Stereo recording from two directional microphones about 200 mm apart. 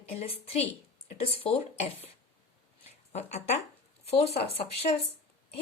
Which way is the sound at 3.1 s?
35° left (ahead or behind).